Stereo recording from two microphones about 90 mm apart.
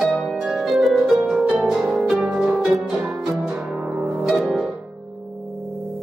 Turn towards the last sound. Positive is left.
turn(degrees=-5)  # may be behind; listen again after turning